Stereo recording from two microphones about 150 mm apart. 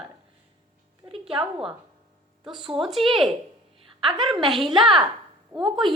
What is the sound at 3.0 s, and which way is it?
Speech, 35° right (ahead or behind).